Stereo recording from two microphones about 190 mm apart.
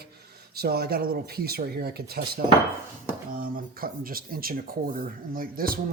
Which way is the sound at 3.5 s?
50° right (ahead or behind).